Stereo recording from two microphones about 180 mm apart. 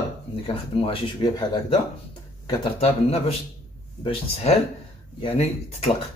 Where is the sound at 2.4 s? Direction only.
35° left (ahead or behind).